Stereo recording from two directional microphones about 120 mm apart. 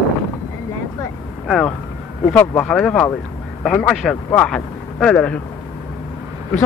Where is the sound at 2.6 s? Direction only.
5° left (ahead or behind).